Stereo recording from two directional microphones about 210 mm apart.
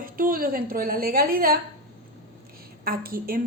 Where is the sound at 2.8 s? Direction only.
45° right (ahead or behind).